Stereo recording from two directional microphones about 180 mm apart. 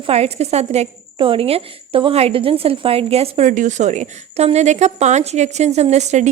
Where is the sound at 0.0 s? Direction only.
35° right (ahead or behind).